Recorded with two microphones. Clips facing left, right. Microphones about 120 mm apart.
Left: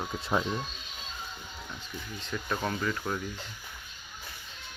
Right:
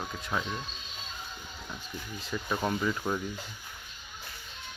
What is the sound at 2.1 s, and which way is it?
Speech, 5° right (ahead or behind).